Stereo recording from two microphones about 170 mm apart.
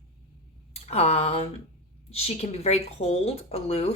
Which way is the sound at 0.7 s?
35° left (ahead or behind).